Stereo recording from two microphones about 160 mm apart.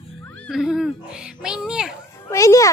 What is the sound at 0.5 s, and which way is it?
A woman's voice, centre (ahead or behind).